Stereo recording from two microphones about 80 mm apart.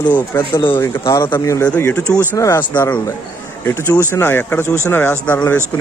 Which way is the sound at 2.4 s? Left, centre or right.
Left.